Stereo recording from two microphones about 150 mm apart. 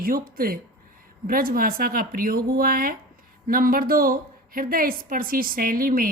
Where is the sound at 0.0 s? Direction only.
75° right (ahead or behind).